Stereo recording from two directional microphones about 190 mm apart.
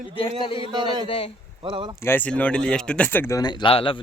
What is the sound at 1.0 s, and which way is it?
Speech, 30° left (ahead or behind).